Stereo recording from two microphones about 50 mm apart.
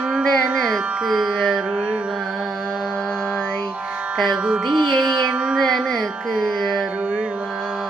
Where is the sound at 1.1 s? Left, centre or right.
Centre.